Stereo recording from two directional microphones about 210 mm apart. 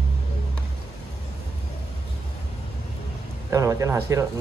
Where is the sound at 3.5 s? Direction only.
15° right (ahead or behind).